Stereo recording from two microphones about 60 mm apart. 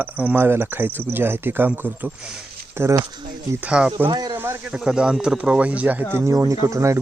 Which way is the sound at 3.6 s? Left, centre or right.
Centre.